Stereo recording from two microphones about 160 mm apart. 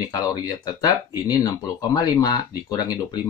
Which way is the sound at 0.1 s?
25° left (ahead or behind).